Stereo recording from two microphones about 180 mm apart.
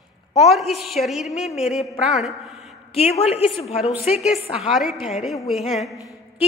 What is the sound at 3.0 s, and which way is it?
Speech, 35° left (ahead or behind).